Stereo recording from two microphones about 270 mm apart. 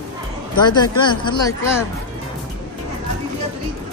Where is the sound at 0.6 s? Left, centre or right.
Centre.